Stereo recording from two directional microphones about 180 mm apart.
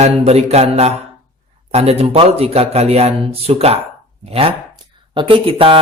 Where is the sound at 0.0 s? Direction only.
35° right (ahead or behind).